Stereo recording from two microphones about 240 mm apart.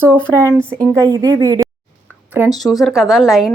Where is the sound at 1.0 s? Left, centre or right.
Centre.